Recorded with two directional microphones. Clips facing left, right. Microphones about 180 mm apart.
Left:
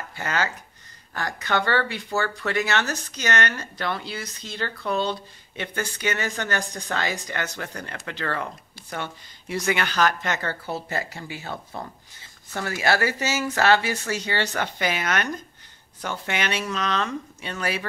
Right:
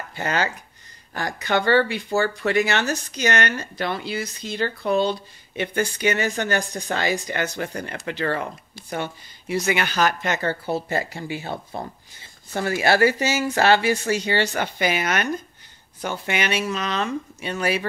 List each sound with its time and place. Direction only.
0.1 s speech: 20° right (ahead or behind)
10.4 s speech: 25° right (ahead or behind)
13.2 s speech: 15° right (ahead or behind)